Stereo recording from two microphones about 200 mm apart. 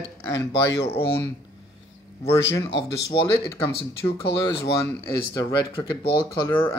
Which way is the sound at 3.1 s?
25° left (ahead or behind).